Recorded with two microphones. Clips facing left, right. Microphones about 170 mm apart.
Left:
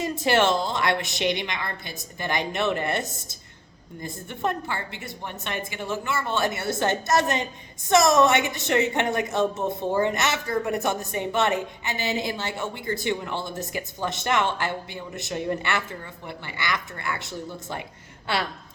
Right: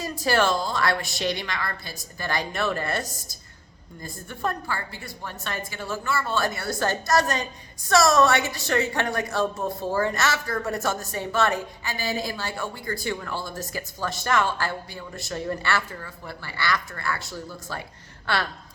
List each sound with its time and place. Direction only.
0.0 s a woman's voice: 20° left (ahead or behind)